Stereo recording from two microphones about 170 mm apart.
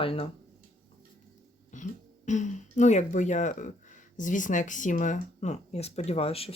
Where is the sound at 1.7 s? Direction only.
45° left (ahead or behind).